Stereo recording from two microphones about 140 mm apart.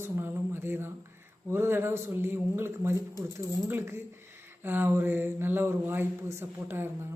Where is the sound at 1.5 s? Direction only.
15° right (ahead or behind).